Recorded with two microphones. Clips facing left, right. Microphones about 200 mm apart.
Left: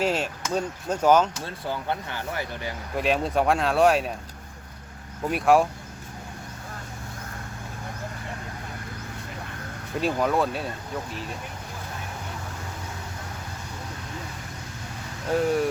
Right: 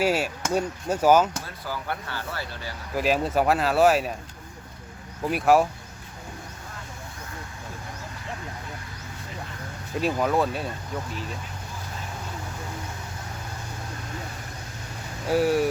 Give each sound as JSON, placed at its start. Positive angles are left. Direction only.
{"t": 0.0, "sound": "speech", "side_deg": -10}
{"t": 1.6, "sound": "speech", "side_deg": 20}
{"t": 2.9, "sound": "speech", "side_deg": 0}
{"t": 5.2, "sound": "speech", "side_deg": 0}
{"t": 10.0, "sound": "speech", "side_deg": 0}
{"t": 15.3, "sound": "speech", "side_deg": -5}